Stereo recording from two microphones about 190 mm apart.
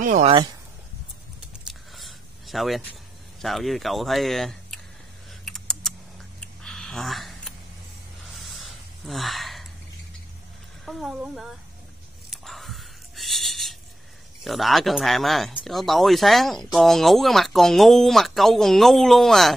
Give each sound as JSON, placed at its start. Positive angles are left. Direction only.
{"t": 0.0, "sound": "speech", "side_deg": -40}
{"t": 1.7, "sound": "a sound", "side_deg": 0}
{"t": 3.3, "sound": "speech", "side_deg": 0}
{"t": 5.4, "sound": "computer keyboard", "side_deg": 0}
{"t": 6.4, "sound": "a sound", "side_deg": 5}
{"t": 9.0, "sound": "gasp", "side_deg": 0}
{"t": 10.9, "sound": "speech", "side_deg": 0}
{"t": 12.3, "sound": "a sound", "side_deg": 0}
{"t": 14.4, "sound": "speech", "side_deg": 0}